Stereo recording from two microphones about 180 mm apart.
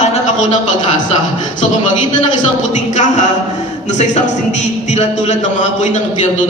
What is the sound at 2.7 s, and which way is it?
A man's voice, 40° left (ahead or behind).